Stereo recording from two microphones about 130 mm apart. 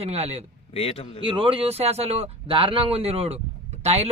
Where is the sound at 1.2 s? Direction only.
45° right (ahead or behind).